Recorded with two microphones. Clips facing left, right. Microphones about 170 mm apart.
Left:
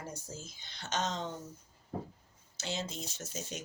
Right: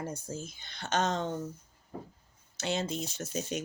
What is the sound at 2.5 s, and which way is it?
Speech, 60° right (ahead or behind).